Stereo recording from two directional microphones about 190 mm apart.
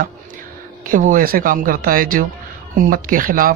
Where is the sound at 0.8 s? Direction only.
45° right (ahead or behind).